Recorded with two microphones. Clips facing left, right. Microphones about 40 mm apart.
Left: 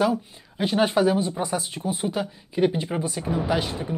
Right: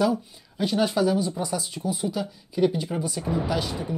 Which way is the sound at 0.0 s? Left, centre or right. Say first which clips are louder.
Left 1 dB; left.